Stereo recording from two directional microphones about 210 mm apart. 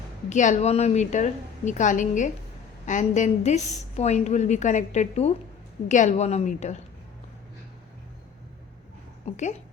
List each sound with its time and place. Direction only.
0.3 s a woman's voice: 35° left (ahead or behind)
9.2 s a woman's voice: 35° left (ahead or behind)